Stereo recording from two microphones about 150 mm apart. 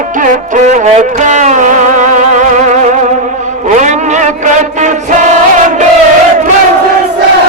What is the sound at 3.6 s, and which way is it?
Vehicle, 55° right (ahead or behind).